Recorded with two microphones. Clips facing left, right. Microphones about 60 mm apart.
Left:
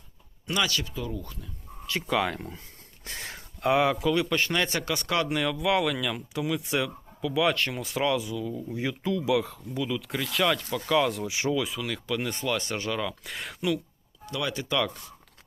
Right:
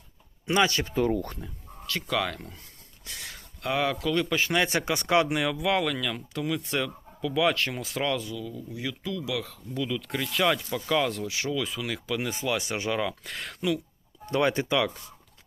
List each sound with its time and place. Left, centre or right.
0.4 s speech: right
0.9 s speech: right
1.9 s speech: centre
3.0 s speech: left; by 4.1 s centre
4.1 s speech: centre
8.3 s speech: left
9.8 s speech: centre
11.3 s speech: left
11.5 s speech: centre
13.2 s speech: centre
14.3 s speech: right